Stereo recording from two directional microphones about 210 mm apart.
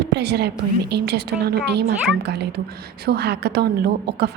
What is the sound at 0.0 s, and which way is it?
A woman's voice, 55° right (ahead or behind).